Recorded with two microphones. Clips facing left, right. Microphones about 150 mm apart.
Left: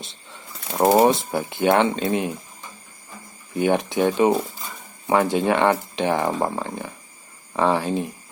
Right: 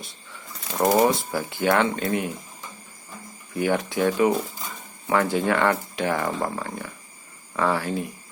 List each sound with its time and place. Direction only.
0.8 s speech: 25° left (ahead or behind)
3.5 s speech: 20° left (ahead or behind)